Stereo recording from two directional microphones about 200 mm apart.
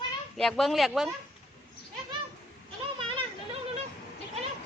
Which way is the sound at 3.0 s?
25° right (ahead or behind).